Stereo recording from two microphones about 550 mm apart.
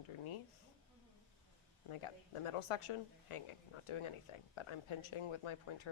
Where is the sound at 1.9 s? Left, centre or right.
Left.